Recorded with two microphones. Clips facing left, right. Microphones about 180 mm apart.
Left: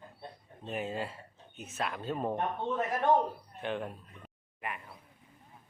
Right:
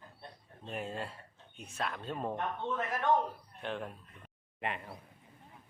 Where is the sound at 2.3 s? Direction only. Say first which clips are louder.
Left 3 dB; 35° left (ahead or behind).